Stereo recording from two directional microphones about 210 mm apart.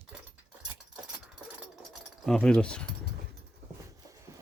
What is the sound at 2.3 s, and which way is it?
Speech, 5° left (ahead or behind).